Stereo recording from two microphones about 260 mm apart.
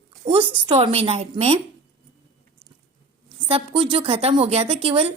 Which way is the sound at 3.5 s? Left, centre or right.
Right.